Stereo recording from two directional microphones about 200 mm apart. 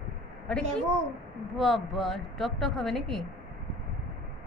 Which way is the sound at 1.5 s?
Centre (ahead or behind).